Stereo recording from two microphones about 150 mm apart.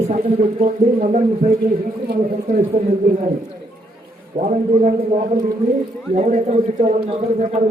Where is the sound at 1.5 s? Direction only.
65° right (ahead or behind).